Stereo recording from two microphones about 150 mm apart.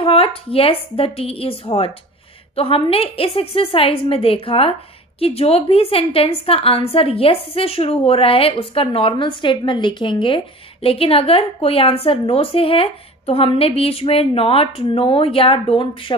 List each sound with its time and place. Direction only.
0.0 s a woman's voice: 40° left (ahead or behind)